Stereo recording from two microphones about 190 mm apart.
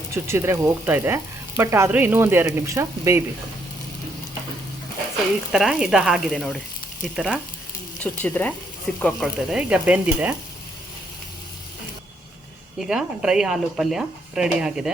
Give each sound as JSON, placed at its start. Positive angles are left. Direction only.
{"t": 0.1, "sound": "speech", "side_deg": -15}
{"t": 5.5, "sound": "speech", "side_deg": 0}
{"t": 12.8, "sound": "speech", "side_deg": -5}